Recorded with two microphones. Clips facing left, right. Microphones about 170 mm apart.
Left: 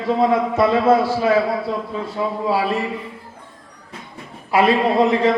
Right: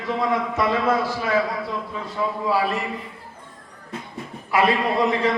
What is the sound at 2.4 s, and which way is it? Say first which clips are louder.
Speech: left 2 dB; 30° left (ahead or behind).